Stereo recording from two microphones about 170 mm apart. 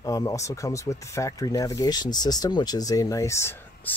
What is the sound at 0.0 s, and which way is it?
Speech, 20° left (ahead or behind).